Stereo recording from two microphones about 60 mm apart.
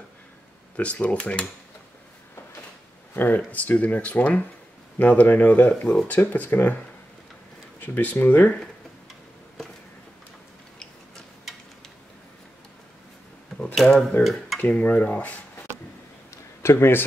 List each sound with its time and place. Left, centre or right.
0.7 s speech: left
3.2 s speech: left
7.8 s speech: left
13.7 s speech: centre
14.2 s speech: centre
14.7 s speech: left
16.6 s a man's voice: left